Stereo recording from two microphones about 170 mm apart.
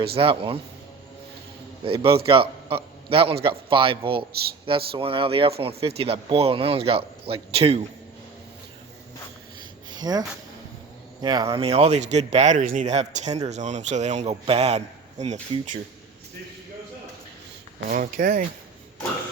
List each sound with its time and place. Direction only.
0.2 s speech: 35° right (ahead or behind)
1.8 s a man's voice: 30° right (ahead or behind)
9.9 s speech: 25° right (ahead or behind)
11.6 s speech: 35° right (ahead or behind)
17.8 s speech: 55° right (ahead or behind)